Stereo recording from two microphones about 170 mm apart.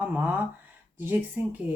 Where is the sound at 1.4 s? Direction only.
10° right (ahead or behind).